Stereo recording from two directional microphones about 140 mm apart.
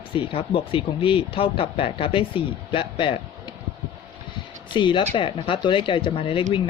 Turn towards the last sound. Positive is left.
turn(degrees=40)  # may be behind; listen again after turning